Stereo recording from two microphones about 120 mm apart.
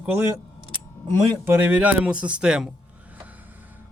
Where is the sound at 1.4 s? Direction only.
15° right (ahead or behind).